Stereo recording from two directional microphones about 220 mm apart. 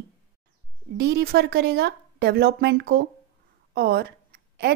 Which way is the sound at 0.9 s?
45° right (ahead or behind).